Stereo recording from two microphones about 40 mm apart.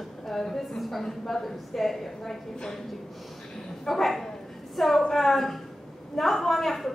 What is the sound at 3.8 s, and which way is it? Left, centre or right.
A woman's voice, centre.